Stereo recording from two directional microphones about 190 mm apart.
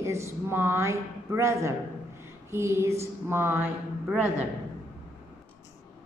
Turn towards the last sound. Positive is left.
turn(degrees=-10)  # may be behind; listen again after turning